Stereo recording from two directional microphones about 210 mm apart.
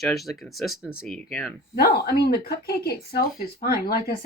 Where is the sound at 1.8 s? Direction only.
50° left (ahead or behind).